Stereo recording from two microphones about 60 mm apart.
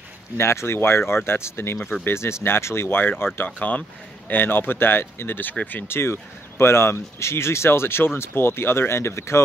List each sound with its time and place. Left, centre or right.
0.4 s speech: left
3.4 s speech: left
4.3 s speech: left
5.9 s speech: left